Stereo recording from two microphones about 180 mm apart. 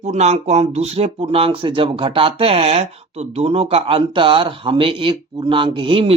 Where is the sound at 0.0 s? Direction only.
40° right (ahead or behind).